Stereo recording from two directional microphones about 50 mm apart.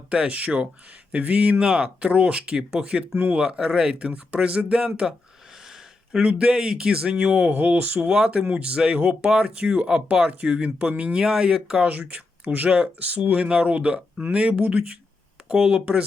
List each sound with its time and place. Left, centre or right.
0.1 s speech: right
3.6 s speech: centre
3.9 s speech: right
5.6 s a sound: centre
6.2 s speech: right
8.0 s speech: centre
11.9 s speech: right